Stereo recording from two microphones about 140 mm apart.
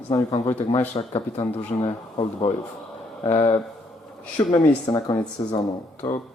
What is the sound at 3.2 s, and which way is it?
Speech, 25° left (ahead or behind).